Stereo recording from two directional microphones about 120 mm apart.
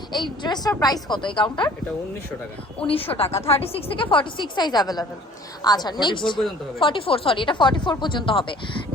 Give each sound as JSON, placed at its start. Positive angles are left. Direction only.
{"t": 0.1, "sound": "a woman's voice", "side_deg": 40}
{"t": 2.8, "sound": "a woman's voice", "side_deg": 50}